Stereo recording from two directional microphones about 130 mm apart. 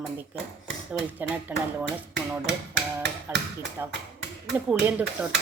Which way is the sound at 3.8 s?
20° right (ahead or behind).